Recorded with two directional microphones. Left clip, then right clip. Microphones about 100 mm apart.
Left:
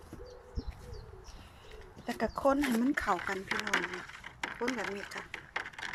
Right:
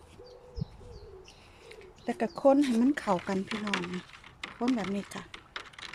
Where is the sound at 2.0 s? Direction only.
45° right (ahead or behind); by 3.4 s 65° right (ahead or behind).